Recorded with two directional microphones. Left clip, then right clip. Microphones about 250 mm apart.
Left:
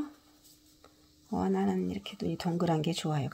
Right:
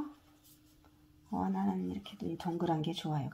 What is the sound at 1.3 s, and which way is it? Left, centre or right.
Speech, left.